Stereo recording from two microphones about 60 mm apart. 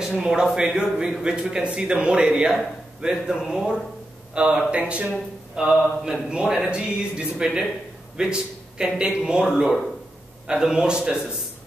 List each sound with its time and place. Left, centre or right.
0.2 s a man's voice: centre